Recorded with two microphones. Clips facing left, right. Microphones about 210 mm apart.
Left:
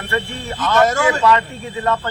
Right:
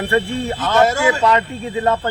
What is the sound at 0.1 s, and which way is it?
Speech, 30° right (ahead or behind).